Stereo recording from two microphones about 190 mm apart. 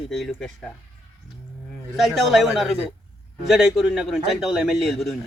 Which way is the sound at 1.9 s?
Centre (ahead or behind).